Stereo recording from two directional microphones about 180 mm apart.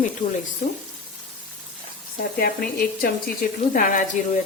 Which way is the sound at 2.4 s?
55° left (ahead or behind).